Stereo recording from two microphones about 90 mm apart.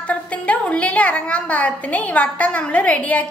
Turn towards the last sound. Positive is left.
turn(degrees=15)  # may be behind; listen again after turning